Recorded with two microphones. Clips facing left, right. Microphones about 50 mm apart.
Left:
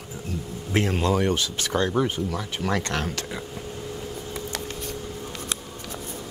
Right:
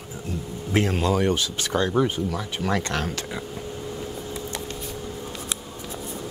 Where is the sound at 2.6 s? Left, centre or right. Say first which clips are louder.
Right 1 dB; right.